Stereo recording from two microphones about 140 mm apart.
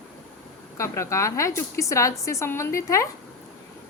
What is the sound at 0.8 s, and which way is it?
A woman's voice, 20° left (ahead or behind).